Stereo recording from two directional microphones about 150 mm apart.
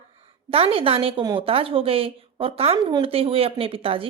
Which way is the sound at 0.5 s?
40° right (ahead or behind).